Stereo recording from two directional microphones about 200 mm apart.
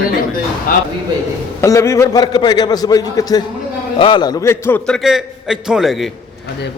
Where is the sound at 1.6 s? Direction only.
15° left (ahead or behind); by 6.1 s centre (ahead or behind).